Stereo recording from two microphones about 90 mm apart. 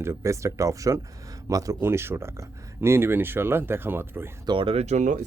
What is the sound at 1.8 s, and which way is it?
Speech, 25° right (ahead or behind).